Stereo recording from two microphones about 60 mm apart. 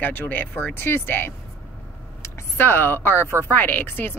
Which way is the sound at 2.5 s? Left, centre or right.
Left.